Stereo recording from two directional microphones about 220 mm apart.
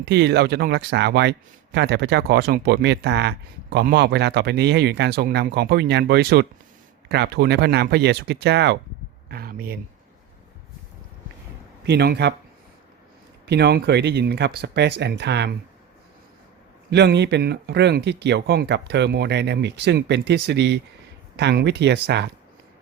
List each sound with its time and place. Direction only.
0.0 s speech: 50° right (ahead or behind)
9.3 s a sound: 40° right (ahead or behind)
11.9 s speech: 50° right (ahead or behind)
13.4 s speech: 50° right (ahead or behind)
16.9 s speech: 50° right (ahead or behind)